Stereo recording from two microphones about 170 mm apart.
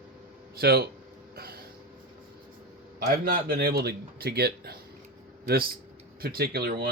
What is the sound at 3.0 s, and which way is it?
A man's voice, 60° right (ahead or behind).